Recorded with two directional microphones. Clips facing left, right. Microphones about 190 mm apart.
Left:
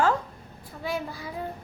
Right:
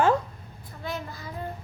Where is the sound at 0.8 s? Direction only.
10° left (ahead or behind).